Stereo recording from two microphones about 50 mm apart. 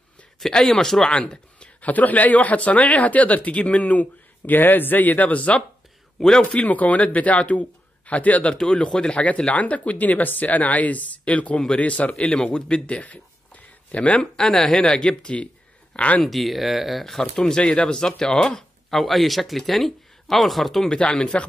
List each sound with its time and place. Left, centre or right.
0.4 s speech: centre
1.8 s speech: left
6.1 s a man's voice: centre
6.4 s speech: left
8.7 s speech: centre
14.3 s speech: centre
16.2 s speech: centre
17.0 s speech: centre
18.9 s speech: centre
20.9 s speech: centre